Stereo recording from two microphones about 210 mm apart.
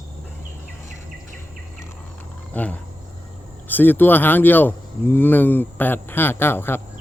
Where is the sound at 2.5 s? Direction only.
10° left (ahead or behind).